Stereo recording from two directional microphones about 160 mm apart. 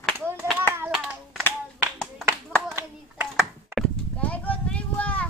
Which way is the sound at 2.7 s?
15° right (ahead or behind).